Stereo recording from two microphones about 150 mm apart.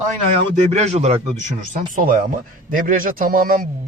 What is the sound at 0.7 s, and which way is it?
Speech, 50° right (ahead or behind).